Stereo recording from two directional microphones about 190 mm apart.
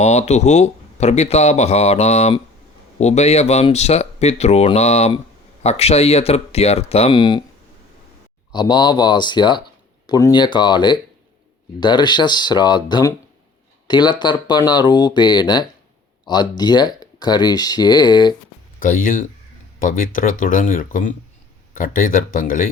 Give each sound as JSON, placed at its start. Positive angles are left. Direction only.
{"t": 0.0, "sound": "speech", "side_deg": 35}
{"t": 8.5, "sound": "speech", "side_deg": 20}
{"t": 18.8, "sound": "speech", "side_deg": 45}